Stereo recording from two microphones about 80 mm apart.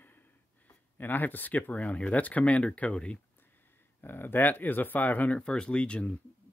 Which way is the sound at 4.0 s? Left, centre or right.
Left.